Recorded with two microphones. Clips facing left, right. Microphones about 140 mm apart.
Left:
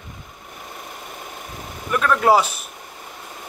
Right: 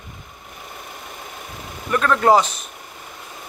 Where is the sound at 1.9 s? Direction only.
5° left (ahead or behind).